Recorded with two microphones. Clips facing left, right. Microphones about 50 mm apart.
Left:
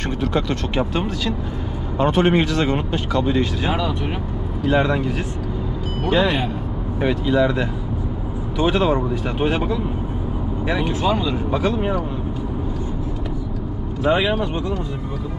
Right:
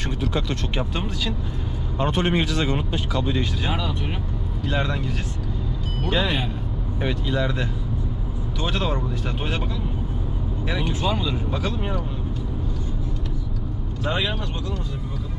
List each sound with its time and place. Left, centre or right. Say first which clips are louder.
0.2 s speech: left 5 dB; centre
14.0 s speech: left 8 dB; centre